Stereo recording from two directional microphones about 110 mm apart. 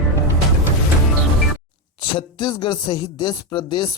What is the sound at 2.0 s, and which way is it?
Speech, 45° left (ahead or behind).